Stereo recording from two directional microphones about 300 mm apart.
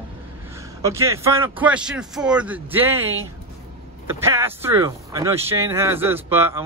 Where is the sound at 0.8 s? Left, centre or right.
Centre.